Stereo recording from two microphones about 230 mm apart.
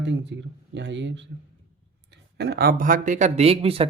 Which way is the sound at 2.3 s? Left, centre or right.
Right.